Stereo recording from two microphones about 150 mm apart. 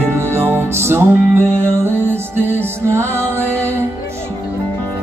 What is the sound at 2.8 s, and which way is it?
Music, 15° right (ahead or behind).